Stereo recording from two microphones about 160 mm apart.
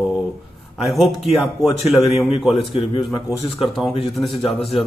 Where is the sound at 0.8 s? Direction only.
Centre (ahead or behind).